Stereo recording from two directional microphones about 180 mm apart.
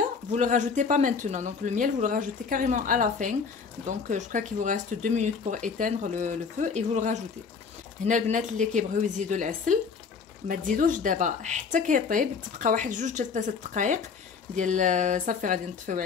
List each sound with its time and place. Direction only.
0.0 s speech: 45° right (ahead or behind)